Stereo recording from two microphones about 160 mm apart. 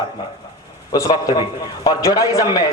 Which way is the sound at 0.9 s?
20° left (ahead or behind).